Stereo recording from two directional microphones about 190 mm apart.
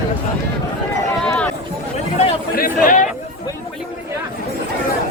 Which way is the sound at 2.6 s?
45° left (ahead or behind).